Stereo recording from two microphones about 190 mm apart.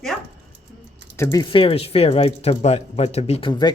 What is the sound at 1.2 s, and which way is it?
Speech, 20° left (ahead or behind).